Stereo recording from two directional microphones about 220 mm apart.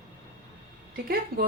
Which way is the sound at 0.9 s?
40° right (ahead or behind).